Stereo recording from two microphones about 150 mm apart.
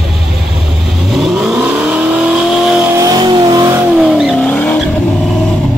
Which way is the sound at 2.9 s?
25° right (ahead or behind).